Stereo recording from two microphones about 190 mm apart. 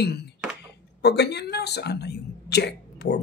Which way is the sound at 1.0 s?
60° left (ahead or behind).